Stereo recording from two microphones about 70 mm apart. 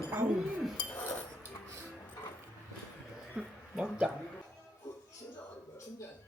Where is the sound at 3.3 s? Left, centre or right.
Centre.